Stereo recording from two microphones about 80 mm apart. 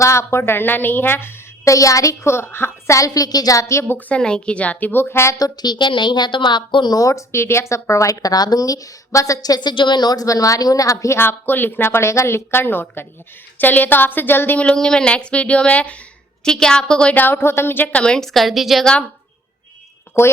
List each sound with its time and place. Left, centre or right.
0.0 s a woman's voice: left
1.6 s speech: left
2.3 s a woman's voice: left
3.9 s a woman's voice: centre; by 5.4 s left
5.4 s a woman's voice: left
6.9 s speech: left
11.2 s a woman's voice: left
17.8 s a woman's voice: centre
20.1 s a woman's voice: left